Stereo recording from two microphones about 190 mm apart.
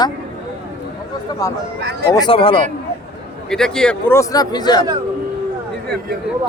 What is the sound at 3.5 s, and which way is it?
A man's voice, 5° left (ahead or behind).